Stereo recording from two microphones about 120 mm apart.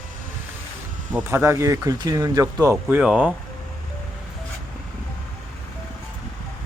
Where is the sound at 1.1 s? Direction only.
20° right (ahead or behind).